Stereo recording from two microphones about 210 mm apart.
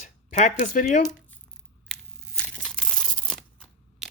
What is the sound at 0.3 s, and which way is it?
Speech, 35° left (ahead or behind).